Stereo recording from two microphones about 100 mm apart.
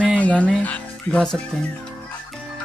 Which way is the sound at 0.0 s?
15° left (ahead or behind).